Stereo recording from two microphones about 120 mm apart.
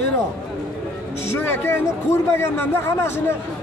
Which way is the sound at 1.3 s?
20° left (ahead or behind).